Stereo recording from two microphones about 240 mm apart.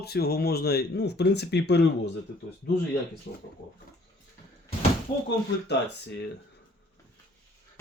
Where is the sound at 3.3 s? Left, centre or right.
Left.